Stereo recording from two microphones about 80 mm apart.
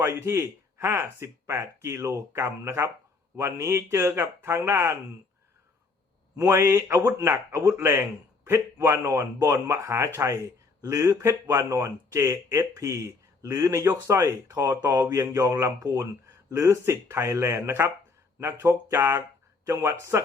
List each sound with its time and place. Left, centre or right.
0.0 s speech: right
6.4 s speech: right
16.5 s speech: right